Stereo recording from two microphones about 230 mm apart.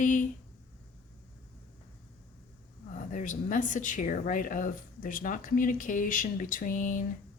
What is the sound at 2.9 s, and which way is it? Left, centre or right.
Speech, left.